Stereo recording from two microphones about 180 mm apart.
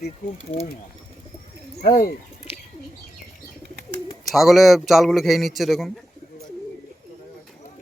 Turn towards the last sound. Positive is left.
turn(degrees=0)  # may be behind; listen again after turning